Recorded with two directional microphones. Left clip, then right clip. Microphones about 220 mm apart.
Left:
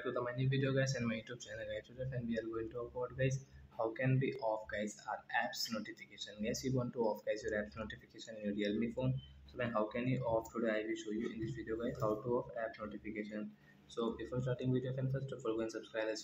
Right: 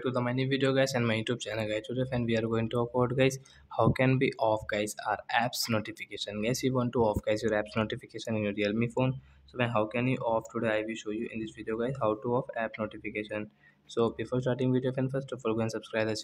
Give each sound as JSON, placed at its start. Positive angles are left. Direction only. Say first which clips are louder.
{"t": 0.0, "sound": "speech", "louder": "right 8 dB", "side_deg": -40}